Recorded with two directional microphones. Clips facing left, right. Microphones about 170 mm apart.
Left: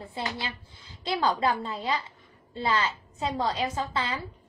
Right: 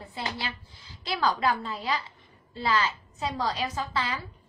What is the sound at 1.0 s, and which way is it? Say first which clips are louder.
A woman's voice: left 1 dB; 25° left (ahead or behind).